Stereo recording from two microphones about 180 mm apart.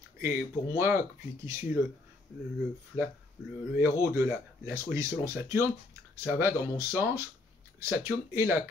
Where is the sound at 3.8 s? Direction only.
10° right (ahead or behind).